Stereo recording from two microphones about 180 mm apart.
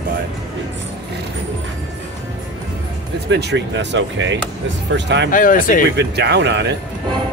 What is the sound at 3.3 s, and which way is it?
Speech, 70° right (ahead or behind).